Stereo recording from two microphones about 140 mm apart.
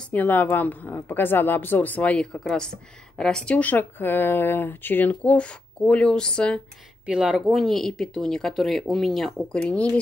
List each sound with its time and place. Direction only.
0.1 s a woman's voice: 15° left (ahead or behind)
7.1 s speech: 5° right (ahead or behind)